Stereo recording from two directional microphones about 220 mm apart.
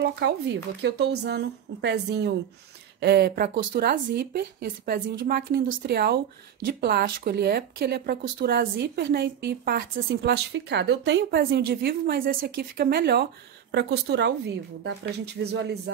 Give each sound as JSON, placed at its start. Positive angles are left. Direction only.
{"t": 0.0, "sound": "speech", "side_deg": -50}